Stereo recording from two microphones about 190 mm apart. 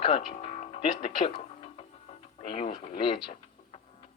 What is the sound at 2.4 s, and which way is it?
Radio, 25° left (ahead or behind).